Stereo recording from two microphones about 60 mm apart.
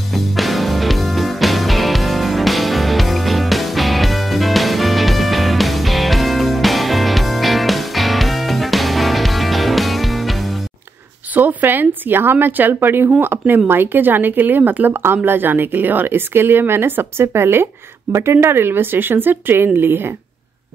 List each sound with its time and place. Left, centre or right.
0.1 s music: centre
11.3 s a woman's voice: right